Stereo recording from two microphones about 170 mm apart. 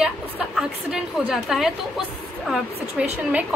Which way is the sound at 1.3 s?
Centre (ahead or behind).